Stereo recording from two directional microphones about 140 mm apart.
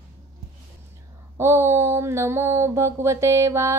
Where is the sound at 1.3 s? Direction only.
20° right (ahead or behind).